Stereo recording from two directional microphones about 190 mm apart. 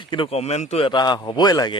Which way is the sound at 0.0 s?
25° left (ahead or behind).